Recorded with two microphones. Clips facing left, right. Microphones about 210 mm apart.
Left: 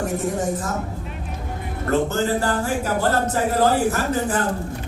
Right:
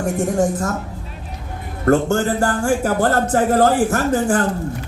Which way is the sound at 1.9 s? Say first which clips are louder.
Right 4 dB; 50° right (ahead or behind).